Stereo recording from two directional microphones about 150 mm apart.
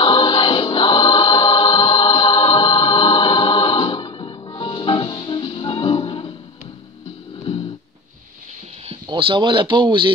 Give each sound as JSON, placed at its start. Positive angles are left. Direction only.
{"t": 0.0, "sound": "choir", "side_deg": 30}
{"t": 9.0, "sound": "speech", "side_deg": -30}